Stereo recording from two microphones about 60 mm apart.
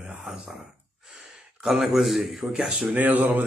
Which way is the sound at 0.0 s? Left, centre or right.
Centre.